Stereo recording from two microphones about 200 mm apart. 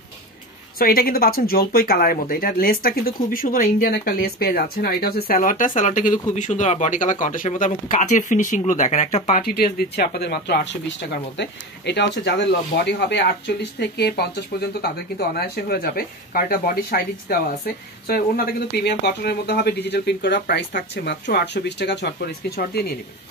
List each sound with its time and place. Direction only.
0.7 s speech: 45° left (ahead or behind)